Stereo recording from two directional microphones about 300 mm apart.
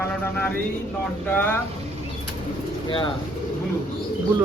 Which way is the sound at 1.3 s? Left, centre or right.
Centre.